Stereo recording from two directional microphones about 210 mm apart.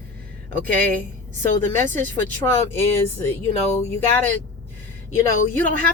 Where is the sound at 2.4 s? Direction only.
10° left (ahead or behind).